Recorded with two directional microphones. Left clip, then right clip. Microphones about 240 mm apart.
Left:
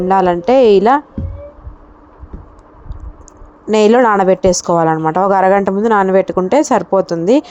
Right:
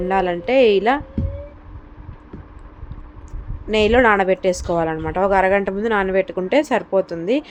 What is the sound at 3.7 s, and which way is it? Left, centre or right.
Speech, left.